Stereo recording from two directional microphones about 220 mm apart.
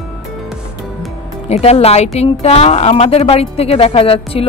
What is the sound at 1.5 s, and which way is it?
A woman's voice, 30° left (ahead or behind).